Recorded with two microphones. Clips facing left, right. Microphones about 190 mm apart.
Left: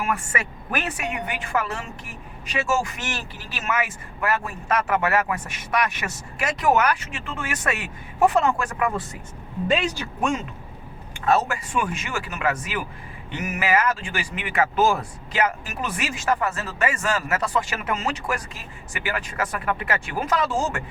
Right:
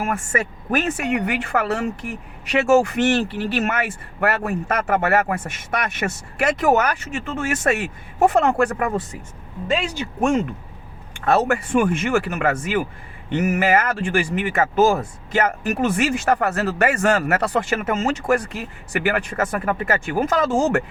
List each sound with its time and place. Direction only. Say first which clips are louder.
0.0 s speech: right 4 dB; 50° right (ahead or behind)
1.1 s a woman's voice: right 6 dB; 70° right (ahead or behind); by 9.0 s 45° right (ahead or behind)
10.2 s speech: right 6 dB; 45° right (ahead or behind)
11.3 s speech: right 4 dB; 60° right (ahead or behind)